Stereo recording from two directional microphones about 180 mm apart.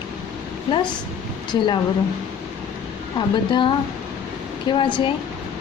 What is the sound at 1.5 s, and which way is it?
Speech, 25° left (ahead or behind).